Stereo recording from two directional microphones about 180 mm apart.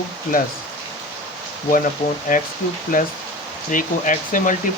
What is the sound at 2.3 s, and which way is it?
Speech, 50° left (ahead or behind).